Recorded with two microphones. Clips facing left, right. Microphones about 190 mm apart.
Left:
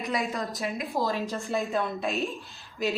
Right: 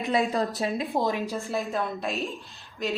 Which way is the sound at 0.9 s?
15° right (ahead or behind).